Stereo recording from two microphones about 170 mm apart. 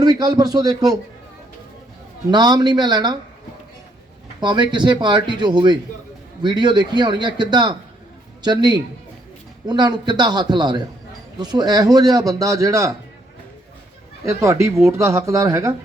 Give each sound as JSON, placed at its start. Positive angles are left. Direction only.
{"t": 0.0, "sound": "a man's voice", "side_deg": -25}
{"t": 2.3, "sound": "a man's voice", "side_deg": -25}
{"t": 4.4, "sound": "a man's voice", "side_deg": -25}
{"t": 14.3, "sound": "speech", "side_deg": -15}